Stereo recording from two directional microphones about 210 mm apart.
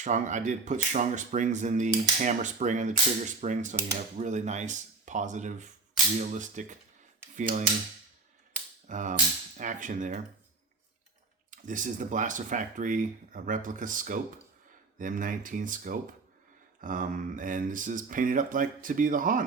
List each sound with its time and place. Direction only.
0.0 s speech: 35° right (ahead or behind)
7.3 s cap gun: 35° right (ahead or behind)
8.9 s speech: 35° right (ahead or behind)
11.5 s speech: 40° right (ahead or behind)